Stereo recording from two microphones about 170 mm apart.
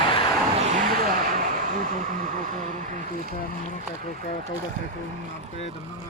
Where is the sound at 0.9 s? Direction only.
55° right (ahead or behind).